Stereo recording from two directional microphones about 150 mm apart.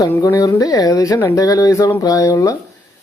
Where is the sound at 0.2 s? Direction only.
20° left (ahead or behind).